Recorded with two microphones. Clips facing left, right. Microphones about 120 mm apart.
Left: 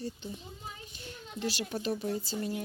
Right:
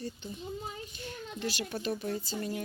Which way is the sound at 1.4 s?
30° left (ahead or behind).